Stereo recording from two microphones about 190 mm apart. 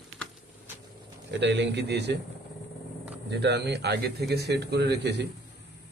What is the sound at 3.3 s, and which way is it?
Speech, 60° right (ahead or behind).